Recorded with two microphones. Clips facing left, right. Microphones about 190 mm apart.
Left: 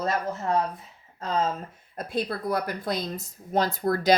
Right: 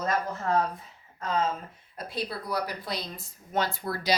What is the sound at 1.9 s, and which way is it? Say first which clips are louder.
Speech: left 5 dB; 50° left (ahead or behind).